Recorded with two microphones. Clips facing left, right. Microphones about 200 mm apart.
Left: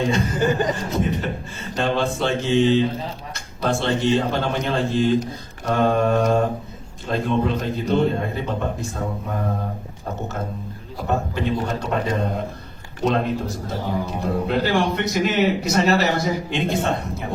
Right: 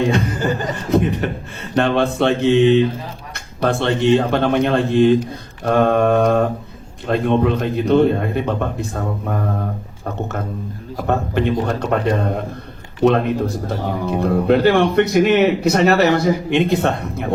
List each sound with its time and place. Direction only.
0.1 s speech: 60° right (ahead or behind)
0.3 s speech: 20° left (ahead or behind)
1.7 s speech: 60° right (ahead or behind)
11.0 s speech: 65° right (ahead or behind)